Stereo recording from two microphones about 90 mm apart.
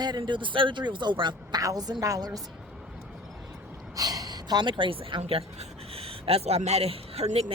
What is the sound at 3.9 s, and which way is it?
A woman's voice, 45° right (ahead or behind).